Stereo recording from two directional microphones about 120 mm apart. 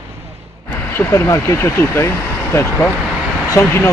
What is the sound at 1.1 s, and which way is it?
Speech, 20° left (ahead or behind).